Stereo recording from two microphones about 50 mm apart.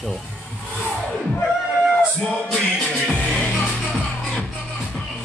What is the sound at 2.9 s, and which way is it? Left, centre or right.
Music, left.